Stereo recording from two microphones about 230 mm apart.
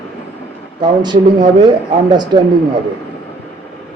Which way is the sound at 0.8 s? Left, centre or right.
Centre.